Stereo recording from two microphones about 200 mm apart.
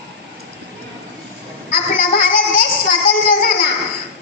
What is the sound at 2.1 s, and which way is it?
Child singing, 50° left (ahead or behind).